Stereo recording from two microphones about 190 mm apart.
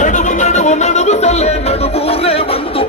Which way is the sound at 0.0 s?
40° left (ahead or behind).